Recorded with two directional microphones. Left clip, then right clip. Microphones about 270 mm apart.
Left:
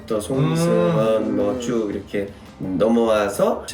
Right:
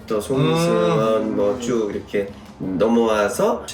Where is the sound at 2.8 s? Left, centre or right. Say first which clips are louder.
Even; centre.